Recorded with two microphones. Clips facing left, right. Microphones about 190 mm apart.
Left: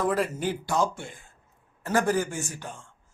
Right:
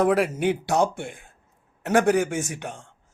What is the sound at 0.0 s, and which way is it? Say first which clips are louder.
Speech: right 6 dB; 70° right (ahead or behind).